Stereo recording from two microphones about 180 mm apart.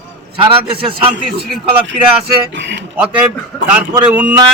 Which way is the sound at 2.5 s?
85° right.